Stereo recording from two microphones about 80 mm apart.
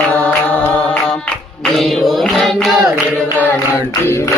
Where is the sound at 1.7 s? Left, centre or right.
Centre.